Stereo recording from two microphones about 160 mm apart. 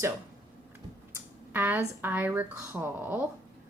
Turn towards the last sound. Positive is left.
turn(degrees=-10)  # may be behind; listen again after turning